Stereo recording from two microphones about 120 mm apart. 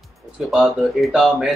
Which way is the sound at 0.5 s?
5° right (ahead or behind).